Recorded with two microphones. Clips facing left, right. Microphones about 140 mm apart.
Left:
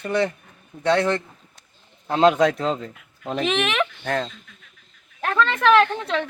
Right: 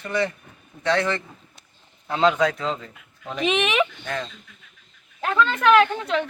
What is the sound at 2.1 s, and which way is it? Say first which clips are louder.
Speech: left 3 dB; 45° left (ahead or behind).